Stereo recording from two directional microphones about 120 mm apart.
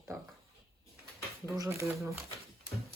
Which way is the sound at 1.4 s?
30° right (ahead or behind).